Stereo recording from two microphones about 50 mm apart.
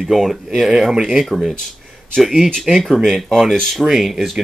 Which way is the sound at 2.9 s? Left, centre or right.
Centre.